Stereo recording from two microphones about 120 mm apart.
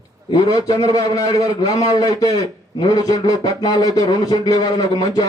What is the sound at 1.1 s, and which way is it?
A man's voice, 30° left (ahead or behind).